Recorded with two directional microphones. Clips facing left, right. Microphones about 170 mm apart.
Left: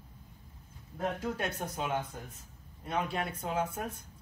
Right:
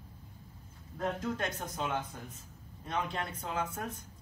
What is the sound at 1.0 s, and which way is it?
Speech, 10° left (ahead or behind).